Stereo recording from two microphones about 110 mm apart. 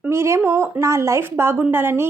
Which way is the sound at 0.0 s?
25° right (ahead or behind).